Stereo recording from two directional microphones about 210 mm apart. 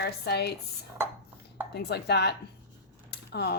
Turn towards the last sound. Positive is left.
turn(degrees=50)  # may be behind; listen again after turning